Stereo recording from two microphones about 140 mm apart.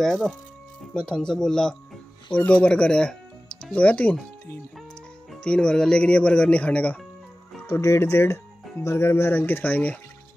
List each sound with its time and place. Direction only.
0.0 s speech: 5° left (ahead or behind)